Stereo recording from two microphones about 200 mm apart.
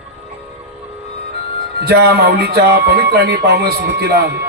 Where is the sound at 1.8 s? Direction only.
55° right (ahead or behind).